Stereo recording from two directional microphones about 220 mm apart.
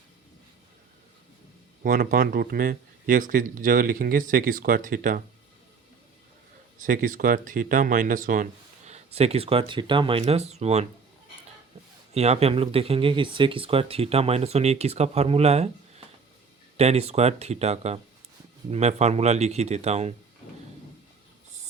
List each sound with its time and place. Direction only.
1.8 s speech: 40° right (ahead or behind)
6.7 s speech: 40° right (ahead or behind)
12.1 s speech: 30° right (ahead or behind)